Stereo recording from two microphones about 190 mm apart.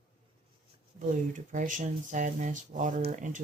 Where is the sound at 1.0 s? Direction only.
45° right (ahead or behind).